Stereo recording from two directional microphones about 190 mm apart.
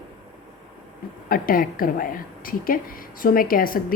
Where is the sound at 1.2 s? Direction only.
50° left (ahead or behind).